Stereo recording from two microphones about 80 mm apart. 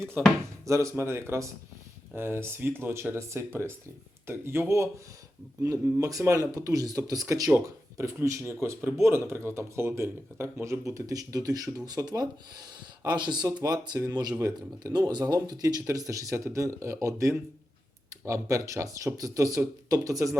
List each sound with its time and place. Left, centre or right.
0.6 s speech: right
13.1 s speech: right